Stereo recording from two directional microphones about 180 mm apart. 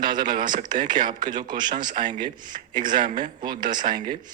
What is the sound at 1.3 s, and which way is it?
Speech, 25° right (ahead or behind).